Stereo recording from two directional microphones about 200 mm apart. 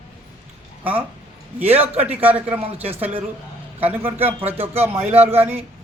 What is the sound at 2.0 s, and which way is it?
A man's voice, 10° right (ahead or behind).